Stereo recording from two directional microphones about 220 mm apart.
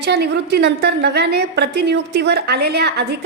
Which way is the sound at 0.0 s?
50° right (ahead or behind).